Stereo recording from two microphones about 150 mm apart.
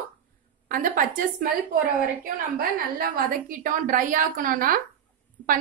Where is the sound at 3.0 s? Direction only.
75° right (ahead or behind).